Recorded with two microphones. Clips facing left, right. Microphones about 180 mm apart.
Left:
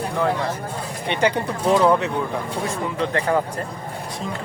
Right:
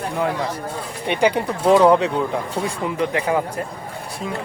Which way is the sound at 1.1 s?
10° right (ahead or behind).